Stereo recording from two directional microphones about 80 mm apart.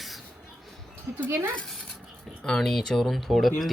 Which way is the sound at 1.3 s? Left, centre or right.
Right.